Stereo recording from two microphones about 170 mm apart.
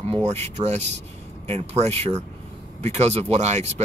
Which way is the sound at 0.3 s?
40° right (ahead or behind).